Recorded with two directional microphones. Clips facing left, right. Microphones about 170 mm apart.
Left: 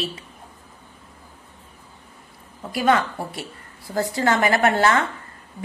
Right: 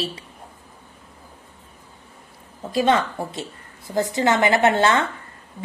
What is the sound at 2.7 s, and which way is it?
A woman's voice, 25° right (ahead or behind).